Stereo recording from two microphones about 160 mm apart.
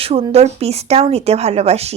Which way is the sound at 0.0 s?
40° right (ahead or behind).